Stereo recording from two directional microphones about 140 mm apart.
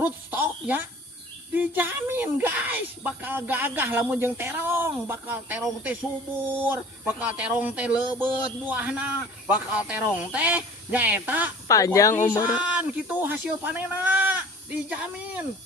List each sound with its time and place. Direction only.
0.0 s a sound: 15° right (ahead or behind)
1.5 s speech: 15° right (ahead or behind)
11.7 s speech: 25° left (ahead or behind)
12.5 s speech: 10° right (ahead or behind)